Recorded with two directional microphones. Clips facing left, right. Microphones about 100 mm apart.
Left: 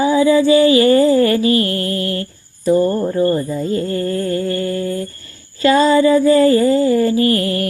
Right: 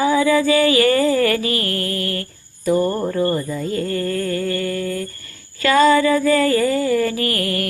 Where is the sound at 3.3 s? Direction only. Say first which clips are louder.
Left 4 dB; 35° left (ahead or behind).